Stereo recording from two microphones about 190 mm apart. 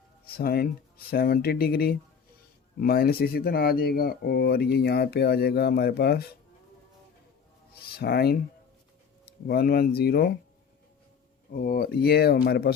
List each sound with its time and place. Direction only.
0.3 s speech: 50° left (ahead or behind)
7.9 s speech: 55° left (ahead or behind)
9.5 s speech: 55° left (ahead or behind)
11.5 s speech: 50° left (ahead or behind)